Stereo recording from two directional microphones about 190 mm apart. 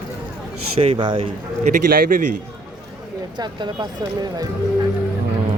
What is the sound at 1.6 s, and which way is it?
Speech, 45° right (ahead or behind).